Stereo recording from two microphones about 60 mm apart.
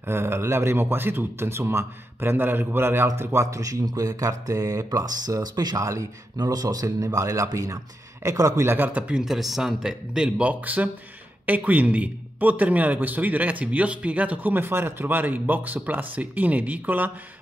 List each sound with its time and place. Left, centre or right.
0.0 s a man's voice: right
3.2 s speech: right
6.5 s speech: right
7.2 s speech: right
8.6 s a man's voice: right
8.9 s a man's voice: centre
9.2 s speech: centre
10.5 s a man's voice: right